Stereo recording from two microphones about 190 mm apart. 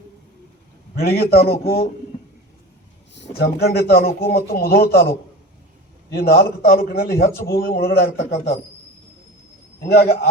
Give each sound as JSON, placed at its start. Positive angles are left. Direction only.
{"t": 0.9, "sound": "speech", "side_deg": 55}
{"t": 3.2, "sound": "speech", "side_deg": 55}
{"t": 6.1, "sound": "a man's voice", "side_deg": 55}
{"t": 9.8, "sound": "speech", "side_deg": 55}